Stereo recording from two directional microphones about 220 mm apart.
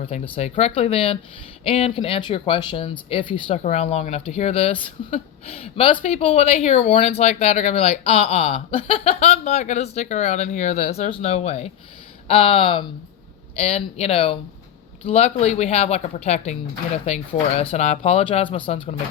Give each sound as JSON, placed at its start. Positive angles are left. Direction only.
{"t": 0.0, "sound": "speech", "side_deg": 30}